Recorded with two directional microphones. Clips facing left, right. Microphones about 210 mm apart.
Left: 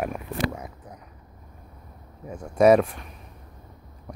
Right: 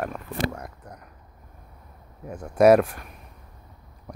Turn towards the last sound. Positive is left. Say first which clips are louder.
# right 1 dB
turn(degrees=0)  # may be behind; listen again after turning